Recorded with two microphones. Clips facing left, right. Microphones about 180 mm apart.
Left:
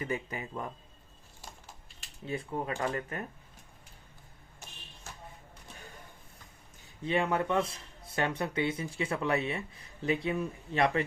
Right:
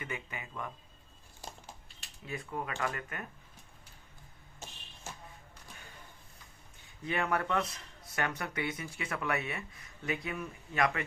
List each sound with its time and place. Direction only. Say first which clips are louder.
0.0 s speech: left 7 dB; 35° left (ahead or behind)
2.2 s speech: left 4 dB; 30° left (ahead or behind)
7.0 s speech: left 3 dB; 25° left (ahead or behind)